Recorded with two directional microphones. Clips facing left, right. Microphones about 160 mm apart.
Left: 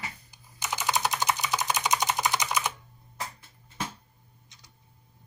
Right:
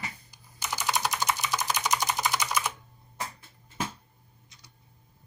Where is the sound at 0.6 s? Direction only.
20° left (ahead or behind).